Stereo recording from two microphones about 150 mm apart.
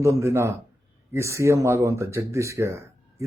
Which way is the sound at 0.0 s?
20° right (ahead or behind).